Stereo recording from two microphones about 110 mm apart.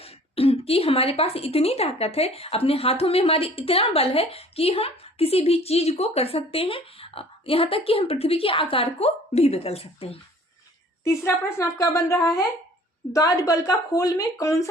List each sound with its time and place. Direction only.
0.0 s a woman's voice: 65° left (ahead or behind)
11.0 s a woman's voice: 25° left (ahead or behind)